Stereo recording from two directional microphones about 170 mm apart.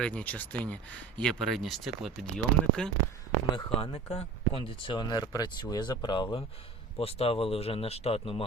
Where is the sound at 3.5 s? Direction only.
35° left (ahead or behind).